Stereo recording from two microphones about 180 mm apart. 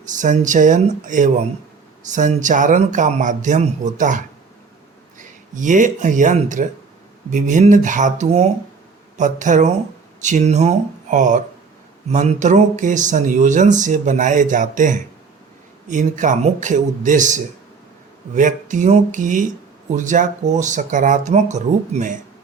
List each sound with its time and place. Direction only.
0.0 s speech: 45° right (ahead or behind)
5.5 s speech: 45° right (ahead or behind)